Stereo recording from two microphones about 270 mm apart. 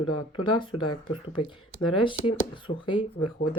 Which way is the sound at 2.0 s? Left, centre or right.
Centre.